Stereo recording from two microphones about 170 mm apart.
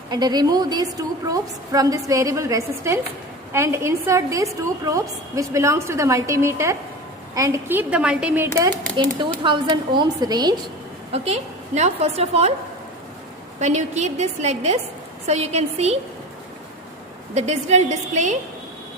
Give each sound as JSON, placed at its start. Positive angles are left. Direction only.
{"t": 0.1, "sound": "a woman's voice", "side_deg": -25}
{"t": 8.7, "sound": "speech", "side_deg": 10}
{"t": 9.1, "sound": "a woman's voice", "side_deg": -30}
{"t": 11.1, "sound": "a woman's voice", "side_deg": -40}
{"t": 13.6, "sound": "a woman's voice", "side_deg": -40}
{"t": 17.3, "sound": "a woman's voice", "side_deg": -40}